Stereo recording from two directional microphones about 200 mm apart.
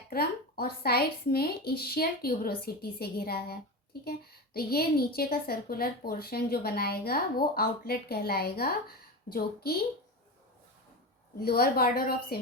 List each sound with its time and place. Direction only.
0.1 s a woman's voice: 50° left (ahead or behind)
11.3 s a woman's voice: 50° left (ahead or behind)